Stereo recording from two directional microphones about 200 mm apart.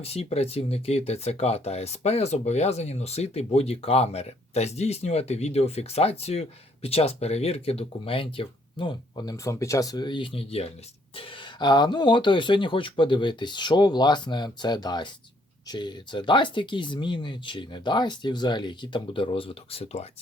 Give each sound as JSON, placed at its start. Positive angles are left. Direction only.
{"t": 0.0, "sound": "speech", "side_deg": 30}